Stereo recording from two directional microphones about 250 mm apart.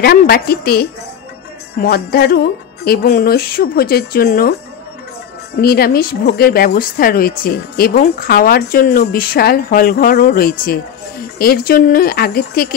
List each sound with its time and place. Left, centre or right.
0.0 s speech: left
5.6 s speech: left